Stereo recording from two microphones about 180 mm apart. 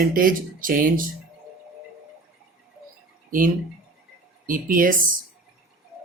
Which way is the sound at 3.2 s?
50° right (ahead or behind).